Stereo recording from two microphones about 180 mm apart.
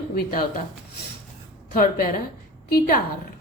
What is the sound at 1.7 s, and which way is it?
Speech, 50° left (ahead or behind).